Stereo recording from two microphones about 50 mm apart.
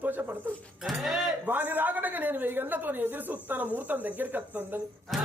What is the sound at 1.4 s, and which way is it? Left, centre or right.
A man's voice, right.